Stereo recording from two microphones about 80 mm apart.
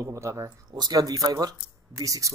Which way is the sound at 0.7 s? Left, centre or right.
Right.